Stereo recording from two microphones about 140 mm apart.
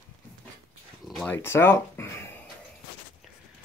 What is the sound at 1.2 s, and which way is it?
Speech, 15° left (ahead or behind).